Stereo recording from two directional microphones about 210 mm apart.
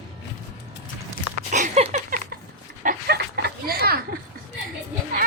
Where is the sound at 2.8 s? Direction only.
50° right (ahead or behind).